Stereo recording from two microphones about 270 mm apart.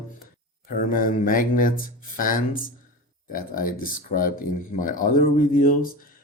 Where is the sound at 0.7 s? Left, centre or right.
Left.